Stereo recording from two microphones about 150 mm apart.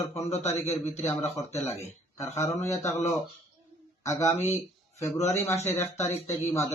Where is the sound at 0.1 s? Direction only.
45° left (ahead or behind).